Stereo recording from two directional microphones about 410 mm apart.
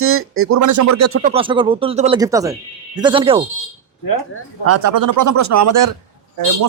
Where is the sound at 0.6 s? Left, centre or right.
Right.